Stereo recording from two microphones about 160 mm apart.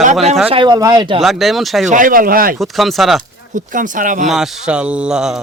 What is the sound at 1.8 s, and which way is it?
Speech, 55° right (ahead or behind).